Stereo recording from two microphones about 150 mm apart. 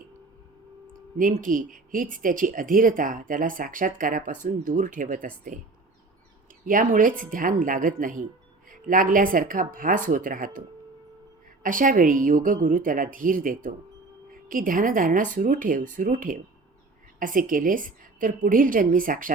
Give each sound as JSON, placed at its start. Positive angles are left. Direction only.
{"t": 0.9, "sound": "speech", "side_deg": -65}
{"t": 6.7, "sound": "speech", "side_deg": -65}
{"t": 11.6, "sound": "speech", "side_deg": -65}